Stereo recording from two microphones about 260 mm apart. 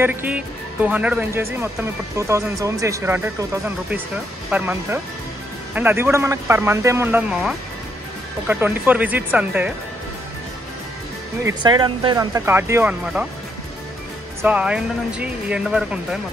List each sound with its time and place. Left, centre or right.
0.0 s speech: centre
11.4 s speech: centre
14.4 s speech: centre